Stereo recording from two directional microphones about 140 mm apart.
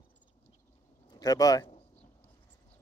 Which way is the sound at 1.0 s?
25° left (ahead or behind).